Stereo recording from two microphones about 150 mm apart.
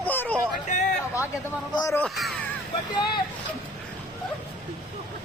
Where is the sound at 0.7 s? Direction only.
55° left (ahead or behind).